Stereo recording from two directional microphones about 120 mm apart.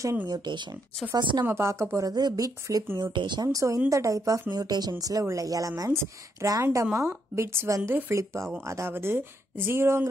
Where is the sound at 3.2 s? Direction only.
40° right (ahead or behind).